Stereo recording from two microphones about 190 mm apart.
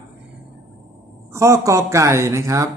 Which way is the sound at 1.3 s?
15° right (ahead or behind).